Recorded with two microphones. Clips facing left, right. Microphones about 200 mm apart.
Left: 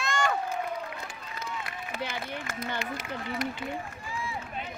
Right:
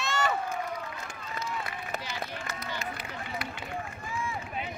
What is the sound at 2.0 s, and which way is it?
Run, 55° left (ahead or behind).